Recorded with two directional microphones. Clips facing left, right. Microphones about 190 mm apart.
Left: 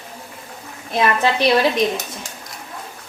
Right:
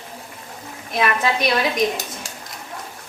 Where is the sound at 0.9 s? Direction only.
30° left (ahead or behind).